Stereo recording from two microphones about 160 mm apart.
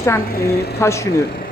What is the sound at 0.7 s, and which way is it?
Speech, 15° left (ahead or behind).